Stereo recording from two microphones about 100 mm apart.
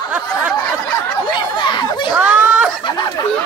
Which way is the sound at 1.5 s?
50° left (ahead or behind).